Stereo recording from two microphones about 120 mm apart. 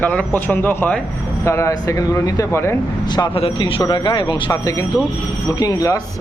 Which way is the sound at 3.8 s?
35° left (ahead or behind).